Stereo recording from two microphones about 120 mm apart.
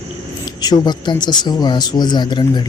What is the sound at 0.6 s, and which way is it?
Speech, 35° left (ahead or behind).